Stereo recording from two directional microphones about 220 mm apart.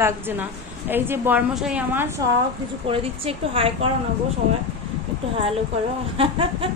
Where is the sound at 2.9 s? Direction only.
25° right (ahead or behind).